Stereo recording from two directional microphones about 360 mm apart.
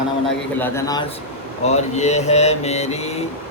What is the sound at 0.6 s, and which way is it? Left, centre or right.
Speech, centre.